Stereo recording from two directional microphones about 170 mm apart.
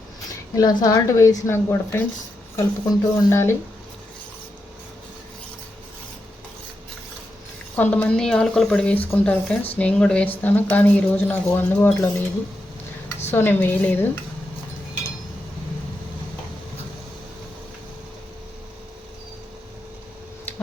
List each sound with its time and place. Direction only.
0.5 s a woman's voice: 20° left (ahead or behind)
7.8 s a woman's voice: 10° left (ahead or behind)
13.3 s a woman's voice: 10° left (ahead or behind)